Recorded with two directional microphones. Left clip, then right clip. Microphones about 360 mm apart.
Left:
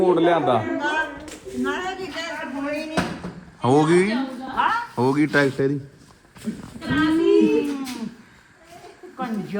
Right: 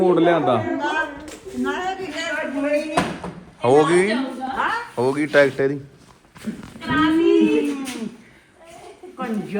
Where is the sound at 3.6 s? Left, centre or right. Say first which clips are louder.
Right 2 dB; centre.